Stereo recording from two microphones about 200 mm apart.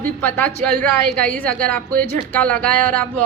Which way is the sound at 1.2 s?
5° left (ahead or behind).